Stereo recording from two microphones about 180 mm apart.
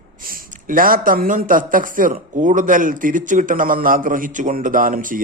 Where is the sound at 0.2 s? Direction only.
55° right (ahead or behind).